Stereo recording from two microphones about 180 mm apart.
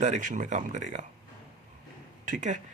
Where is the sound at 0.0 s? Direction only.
45° right (ahead or behind).